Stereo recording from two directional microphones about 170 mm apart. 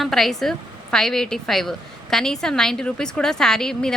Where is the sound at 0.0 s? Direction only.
Centre (ahead or behind).